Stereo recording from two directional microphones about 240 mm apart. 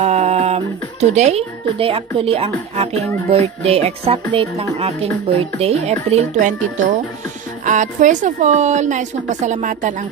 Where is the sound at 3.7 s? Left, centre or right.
Right.